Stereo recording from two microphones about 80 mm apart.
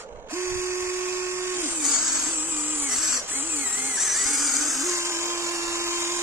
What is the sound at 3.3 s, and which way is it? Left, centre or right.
Drill, right.